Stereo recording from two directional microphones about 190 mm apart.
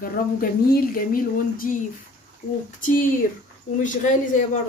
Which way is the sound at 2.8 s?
45° left (ahead or behind).